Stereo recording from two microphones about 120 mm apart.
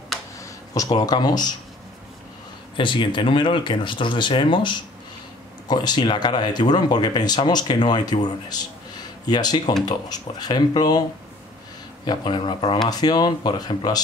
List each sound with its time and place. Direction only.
0.4 s speech: 30° left (ahead or behind)
2.8 s speech: 40° left (ahead or behind)